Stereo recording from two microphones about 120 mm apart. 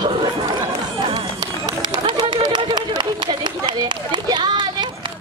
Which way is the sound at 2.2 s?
40° right (ahead or behind).